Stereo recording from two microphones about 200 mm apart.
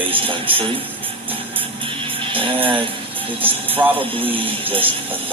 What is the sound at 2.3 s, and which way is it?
Speech, 25° right (ahead or behind).